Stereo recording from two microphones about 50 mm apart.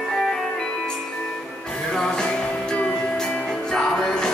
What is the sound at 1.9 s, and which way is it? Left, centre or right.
Music, centre.